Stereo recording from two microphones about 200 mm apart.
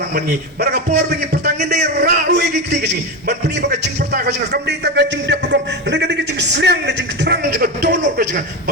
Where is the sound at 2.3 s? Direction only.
55° right (ahead or behind).